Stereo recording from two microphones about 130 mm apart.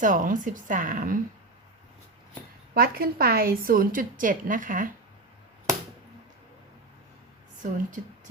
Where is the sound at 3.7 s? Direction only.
90° right.